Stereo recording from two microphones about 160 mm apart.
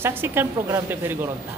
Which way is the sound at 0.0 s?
15° right (ahead or behind).